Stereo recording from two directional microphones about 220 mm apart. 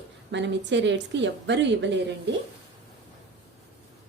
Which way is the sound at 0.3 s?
55° right (ahead or behind).